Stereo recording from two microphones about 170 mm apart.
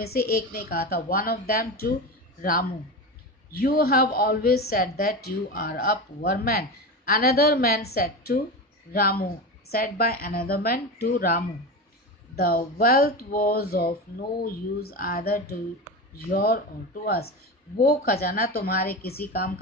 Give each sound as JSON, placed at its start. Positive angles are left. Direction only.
{"t": 0.0, "sound": "speech", "side_deg": 65}
{"t": 3.5, "sound": "speech", "side_deg": 60}